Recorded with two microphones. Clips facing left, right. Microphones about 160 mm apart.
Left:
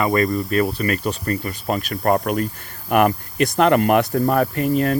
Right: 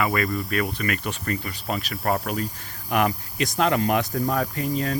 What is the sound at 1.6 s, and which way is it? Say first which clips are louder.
Speech: left 6 dB; 50° left (ahead or behind).